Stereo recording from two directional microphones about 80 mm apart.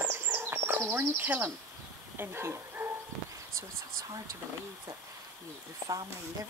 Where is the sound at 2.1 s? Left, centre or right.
Right.